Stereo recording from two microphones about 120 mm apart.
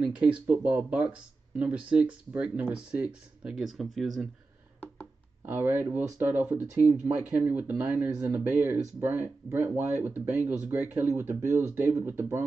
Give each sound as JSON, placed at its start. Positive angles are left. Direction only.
{"t": 0.0, "sound": "speech", "side_deg": -10}
{"t": 5.5, "sound": "speech", "side_deg": -15}